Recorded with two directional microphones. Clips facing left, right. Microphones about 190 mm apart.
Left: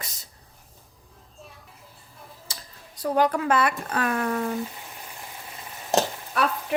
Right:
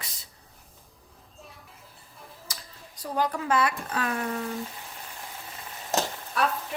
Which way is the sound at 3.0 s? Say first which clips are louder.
Left 6 dB; 65° left (ahead or behind).